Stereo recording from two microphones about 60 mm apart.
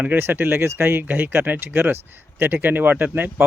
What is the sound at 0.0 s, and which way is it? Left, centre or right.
Speech, right.